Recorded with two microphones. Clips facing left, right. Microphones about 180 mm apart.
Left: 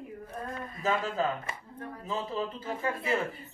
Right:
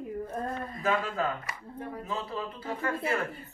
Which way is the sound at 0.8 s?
20° left (ahead or behind).